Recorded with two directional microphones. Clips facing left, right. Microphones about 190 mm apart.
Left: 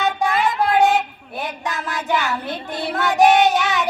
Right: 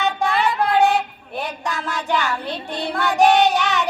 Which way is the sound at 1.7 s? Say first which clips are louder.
Even; 20° left (ahead or behind).